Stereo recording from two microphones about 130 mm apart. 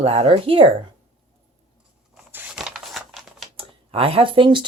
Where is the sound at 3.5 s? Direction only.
45° right (ahead or behind).